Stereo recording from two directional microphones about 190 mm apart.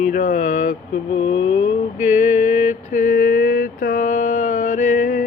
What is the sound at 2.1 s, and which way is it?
Mantra, 40° left (ahead or behind).